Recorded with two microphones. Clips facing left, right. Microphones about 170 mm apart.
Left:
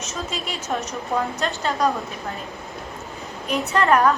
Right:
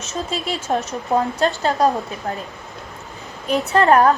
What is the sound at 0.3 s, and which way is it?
A woman's voice, 35° right (ahead or behind).